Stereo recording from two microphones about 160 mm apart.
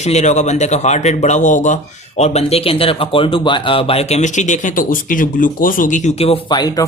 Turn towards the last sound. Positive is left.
turn(degrees=25)  # may be behind; listen again after turning